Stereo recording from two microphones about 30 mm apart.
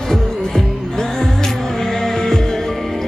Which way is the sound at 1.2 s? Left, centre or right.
Centre.